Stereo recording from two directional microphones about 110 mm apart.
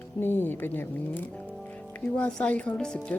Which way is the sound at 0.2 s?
20° left (ahead or behind).